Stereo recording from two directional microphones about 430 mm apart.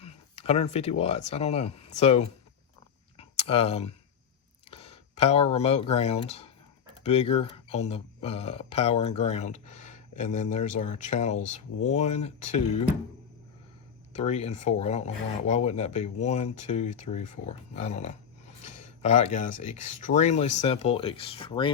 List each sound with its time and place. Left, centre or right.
0.0 s speech: centre
3.2 s a sound: centre
4.7 s speech: centre
14.2 s speech: centre
18.6 s a sound: centre
19.6 s speech: centre